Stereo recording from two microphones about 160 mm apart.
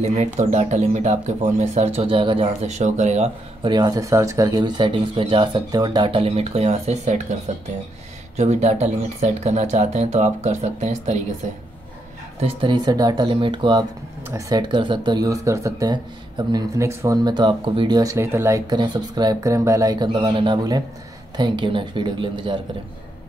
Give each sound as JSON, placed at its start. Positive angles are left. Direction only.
{"t": 0.0, "sound": "speech", "side_deg": -45}
{"t": 3.6, "sound": "speech", "side_deg": -25}
{"t": 8.4, "sound": "speech", "side_deg": -45}
{"t": 12.4, "sound": "speech", "side_deg": -35}